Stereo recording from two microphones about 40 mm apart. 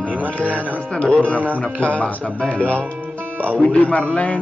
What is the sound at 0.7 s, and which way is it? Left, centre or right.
Speech, left.